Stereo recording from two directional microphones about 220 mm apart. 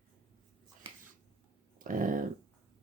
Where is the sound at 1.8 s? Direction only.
40° right (ahead or behind).